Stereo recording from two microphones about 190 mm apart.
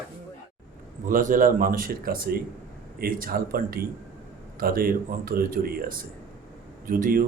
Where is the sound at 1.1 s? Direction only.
45° right (ahead or behind).